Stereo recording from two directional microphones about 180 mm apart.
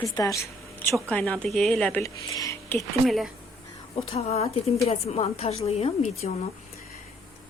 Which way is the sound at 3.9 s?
35° left (ahead or behind).